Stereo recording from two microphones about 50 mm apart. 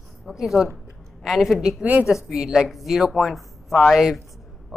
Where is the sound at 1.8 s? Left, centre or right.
Right.